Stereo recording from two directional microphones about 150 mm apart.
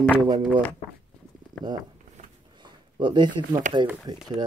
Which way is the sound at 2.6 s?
30° right (ahead or behind).